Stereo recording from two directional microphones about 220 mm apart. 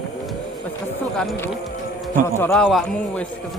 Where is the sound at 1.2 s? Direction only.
5° left (ahead or behind).